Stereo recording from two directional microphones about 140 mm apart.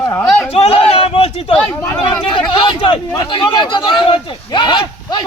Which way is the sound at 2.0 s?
35° left (ahead or behind).